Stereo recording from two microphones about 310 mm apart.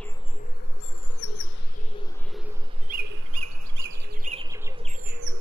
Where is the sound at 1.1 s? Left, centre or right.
Left.